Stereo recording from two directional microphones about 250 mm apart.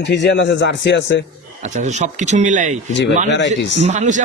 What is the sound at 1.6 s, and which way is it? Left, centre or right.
Speech, right.